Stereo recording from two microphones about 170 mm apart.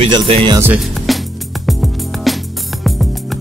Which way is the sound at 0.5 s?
10° right (ahead or behind).